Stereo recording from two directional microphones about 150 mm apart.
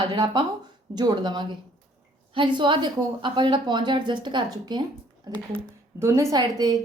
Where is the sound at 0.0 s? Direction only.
30° right (ahead or behind).